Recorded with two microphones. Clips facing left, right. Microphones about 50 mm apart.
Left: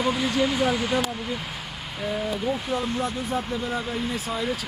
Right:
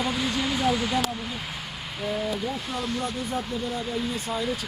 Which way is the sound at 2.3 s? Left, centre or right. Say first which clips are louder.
Left 4 dB; left.